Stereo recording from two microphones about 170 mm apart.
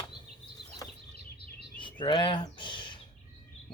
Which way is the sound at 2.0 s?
25° left (ahead or behind).